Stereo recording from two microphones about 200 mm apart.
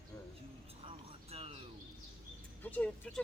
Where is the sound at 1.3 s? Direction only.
30° right (ahead or behind).